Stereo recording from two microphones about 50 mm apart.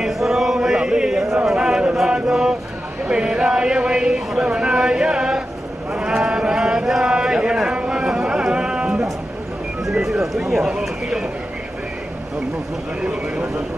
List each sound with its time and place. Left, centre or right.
0.0 s chant: centre
1.6 s chant: centre
2.0 s mantra: centre
3.1 s a sound: centre
10.0 s music: centre
10.8 s a sound: centre